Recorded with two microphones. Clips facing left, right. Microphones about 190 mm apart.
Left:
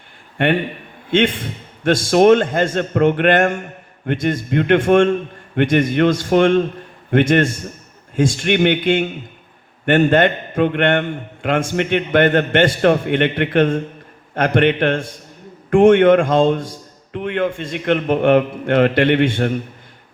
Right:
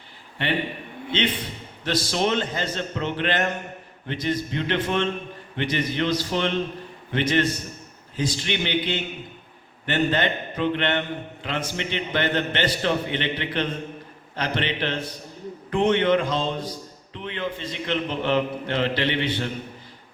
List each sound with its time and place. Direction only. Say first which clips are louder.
1.8 s a man's voice: left 11 dB; 50° left (ahead or behind)